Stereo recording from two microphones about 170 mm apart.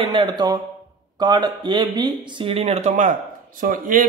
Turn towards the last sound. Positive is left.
turn(degrees=-50)  # may be behind; listen again after turning